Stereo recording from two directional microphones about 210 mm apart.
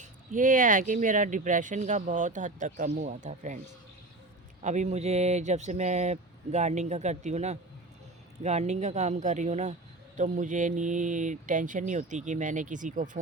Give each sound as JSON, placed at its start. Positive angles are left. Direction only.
{"t": 0.0, "sound": "speech", "side_deg": -40}
{"t": 4.6, "sound": "speech", "side_deg": -35}